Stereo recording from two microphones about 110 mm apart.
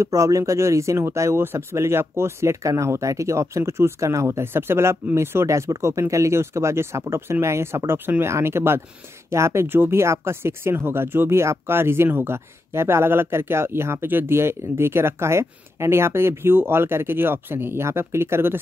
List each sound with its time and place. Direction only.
0.0 s speech: 30° right (ahead or behind)